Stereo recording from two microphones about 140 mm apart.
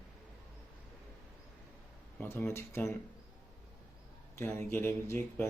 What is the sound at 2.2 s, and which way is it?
Speech, 15° left (ahead or behind).